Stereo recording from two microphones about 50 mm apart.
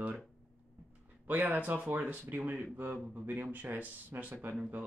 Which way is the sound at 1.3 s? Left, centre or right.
Right.